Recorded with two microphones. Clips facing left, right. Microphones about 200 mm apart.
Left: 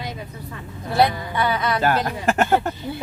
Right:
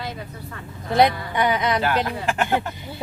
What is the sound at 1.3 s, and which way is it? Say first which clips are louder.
Speech: right 1 dB; 20° right (ahead or behind).